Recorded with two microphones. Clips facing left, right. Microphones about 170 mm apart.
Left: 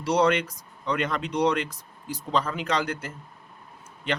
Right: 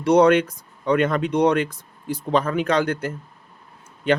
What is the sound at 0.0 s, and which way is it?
Speech, 55° right (ahead or behind).